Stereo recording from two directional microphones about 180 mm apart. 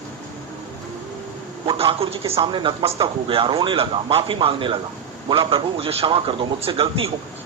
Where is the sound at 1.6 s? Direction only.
30° right (ahead or behind).